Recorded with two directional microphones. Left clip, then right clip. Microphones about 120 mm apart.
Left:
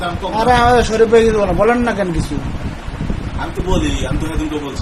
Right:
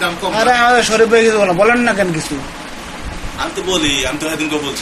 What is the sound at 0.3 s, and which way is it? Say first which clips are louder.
A man's voice: even; 35° left (ahead or behind).